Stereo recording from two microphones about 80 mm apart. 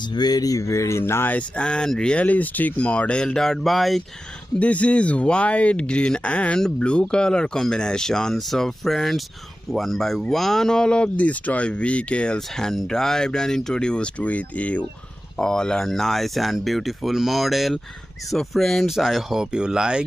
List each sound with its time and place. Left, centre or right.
0.1 s speech: left
1.6 s speech: centre
4.6 s speech: centre